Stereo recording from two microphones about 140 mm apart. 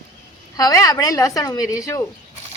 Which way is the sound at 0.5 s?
25° left (ahead or behind).